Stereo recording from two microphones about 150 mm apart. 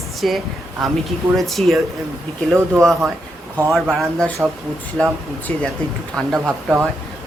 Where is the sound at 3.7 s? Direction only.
Centre (ahead or behind).